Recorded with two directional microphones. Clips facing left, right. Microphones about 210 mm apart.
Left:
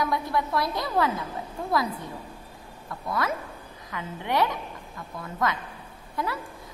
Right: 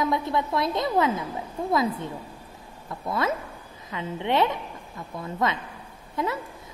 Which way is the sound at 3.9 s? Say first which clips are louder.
Right 4 dB; 25° right (ahead or behind).